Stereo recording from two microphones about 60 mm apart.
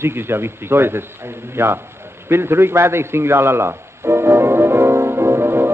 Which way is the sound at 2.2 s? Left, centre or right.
Right.